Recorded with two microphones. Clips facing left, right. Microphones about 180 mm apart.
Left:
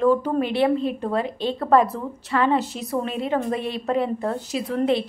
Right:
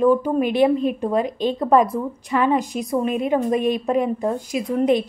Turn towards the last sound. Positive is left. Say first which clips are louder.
# right 3 dB
turn(degrees=-15)  # may be behind; listen again after turning